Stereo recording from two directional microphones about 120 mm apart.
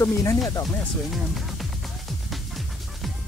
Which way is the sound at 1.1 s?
Centre (ahead or behind).